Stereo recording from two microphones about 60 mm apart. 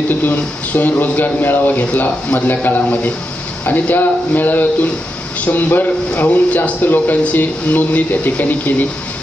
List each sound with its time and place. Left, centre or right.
0.1 s speech: left